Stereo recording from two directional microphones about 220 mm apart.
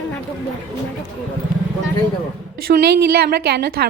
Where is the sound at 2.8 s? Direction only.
50° right (ahead or behind).